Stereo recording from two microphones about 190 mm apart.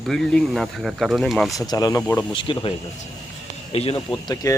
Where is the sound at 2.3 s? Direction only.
25° left (ahead or behind).